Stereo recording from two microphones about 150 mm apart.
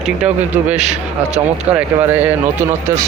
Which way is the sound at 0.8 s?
50° right (ahead or behind).